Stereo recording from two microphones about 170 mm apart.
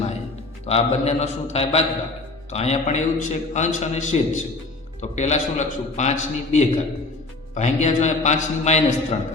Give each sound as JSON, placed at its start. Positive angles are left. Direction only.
{"t": 0.7, "sound": "a man's voice", "side_deg": 40}